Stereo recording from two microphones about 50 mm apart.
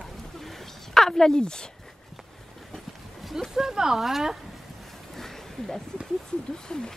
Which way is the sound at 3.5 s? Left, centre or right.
Centre.